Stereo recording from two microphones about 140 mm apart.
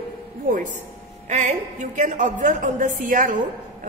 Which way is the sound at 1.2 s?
60° right (ahead or behind).